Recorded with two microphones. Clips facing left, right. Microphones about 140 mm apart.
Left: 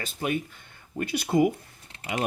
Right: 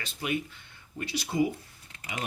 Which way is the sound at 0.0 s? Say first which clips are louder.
Left 3 dB; 45° left (ahead or behind).